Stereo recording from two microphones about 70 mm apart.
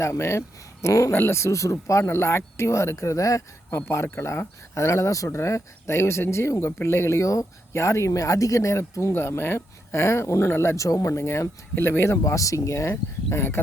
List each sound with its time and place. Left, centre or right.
0.0 s speech: left
3.7 s speech: left
12.2 s speech: left